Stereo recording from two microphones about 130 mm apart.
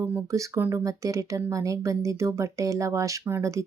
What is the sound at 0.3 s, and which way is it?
Speech, 25° right (ahead or behind).